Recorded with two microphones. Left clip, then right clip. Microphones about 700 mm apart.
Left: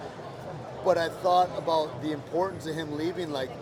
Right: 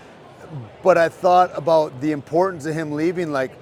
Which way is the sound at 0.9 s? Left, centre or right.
Right.